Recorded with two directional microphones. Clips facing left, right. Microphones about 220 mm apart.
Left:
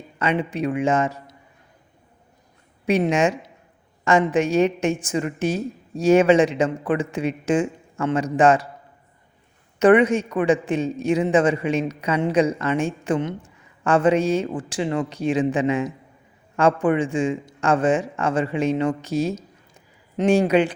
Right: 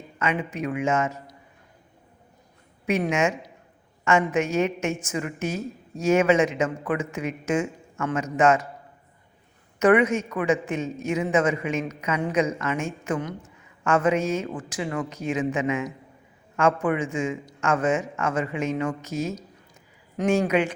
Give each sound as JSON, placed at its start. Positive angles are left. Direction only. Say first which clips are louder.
{"t": 0.2, "sound": "a man's voice", "louder": "left 4 dB", "side_deg": 30}
{"t": 2.8, "sound": "a man's voice", "louder": "left 4 dB", "side_deg": 30}
{"t": 9.7, "sound": "a man's voice", "louder": "left 4 dB", "side_deg": 30}